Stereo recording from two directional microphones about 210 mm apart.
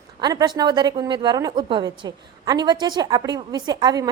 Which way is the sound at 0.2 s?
20° right (ahead or behind).